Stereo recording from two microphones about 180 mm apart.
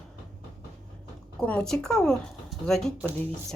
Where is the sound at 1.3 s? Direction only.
5° left (ahead or behind).